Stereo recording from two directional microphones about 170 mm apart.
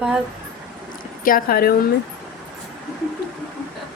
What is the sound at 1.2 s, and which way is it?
Speech, 60° left (ahead or behind).